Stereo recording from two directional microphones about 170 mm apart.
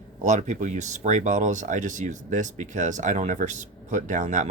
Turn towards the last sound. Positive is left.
turn(degrees=-45)  # may be behind; listen again after turning